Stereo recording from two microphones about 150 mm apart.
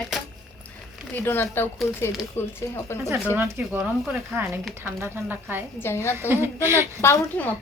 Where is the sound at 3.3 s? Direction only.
15° right (ahead or behind).